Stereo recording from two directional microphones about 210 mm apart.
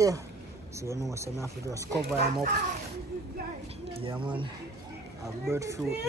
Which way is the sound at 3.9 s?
25° right (ahead or behind).